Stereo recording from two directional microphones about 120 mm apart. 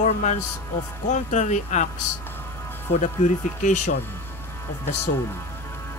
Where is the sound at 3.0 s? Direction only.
90° left.